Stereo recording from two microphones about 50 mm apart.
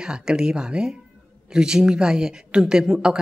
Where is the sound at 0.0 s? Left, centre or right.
Centre.